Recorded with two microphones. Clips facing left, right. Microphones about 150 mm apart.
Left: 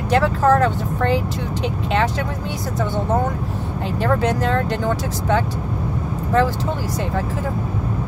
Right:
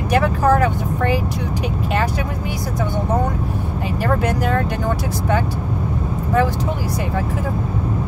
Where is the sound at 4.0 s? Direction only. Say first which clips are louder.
Left 1 dB; 10° right (ahead or behind).